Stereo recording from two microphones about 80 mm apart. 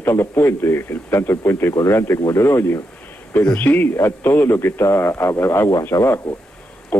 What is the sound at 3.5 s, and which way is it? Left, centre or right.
A man's voice, left.